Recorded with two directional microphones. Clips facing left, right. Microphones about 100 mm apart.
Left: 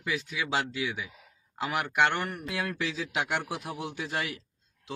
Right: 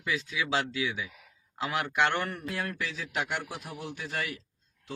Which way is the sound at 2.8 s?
65° left (ahead or behind).